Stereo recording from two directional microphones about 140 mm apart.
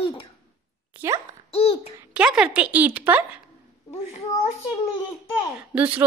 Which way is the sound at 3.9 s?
50° left (ahead or behind).